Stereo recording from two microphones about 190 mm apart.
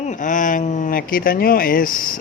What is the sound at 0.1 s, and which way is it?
Speech, 45° left (ahead or behind).